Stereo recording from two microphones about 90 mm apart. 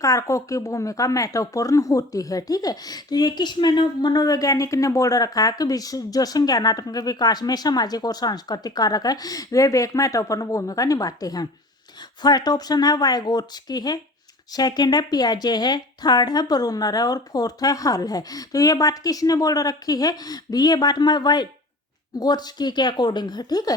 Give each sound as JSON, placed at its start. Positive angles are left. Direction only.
{"t": 0.0, "sound": "speech", "side_deg": 35}